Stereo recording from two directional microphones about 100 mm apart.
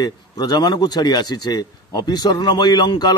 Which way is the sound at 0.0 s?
40° left (ahead or behind).